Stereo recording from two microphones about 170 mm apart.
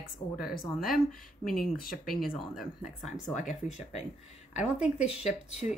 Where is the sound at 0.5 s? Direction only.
60° left (ahead or behind).